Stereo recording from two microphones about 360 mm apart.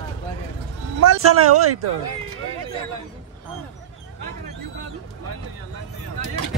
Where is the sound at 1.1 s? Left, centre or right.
Right.